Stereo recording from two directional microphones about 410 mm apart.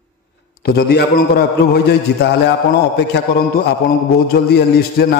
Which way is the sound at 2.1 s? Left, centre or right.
Left.